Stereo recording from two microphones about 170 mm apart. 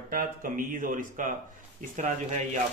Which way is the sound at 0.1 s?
55° right (ahead or behind).